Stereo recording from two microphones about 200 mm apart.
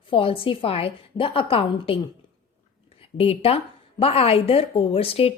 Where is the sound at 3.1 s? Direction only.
30° left (ahead or behind).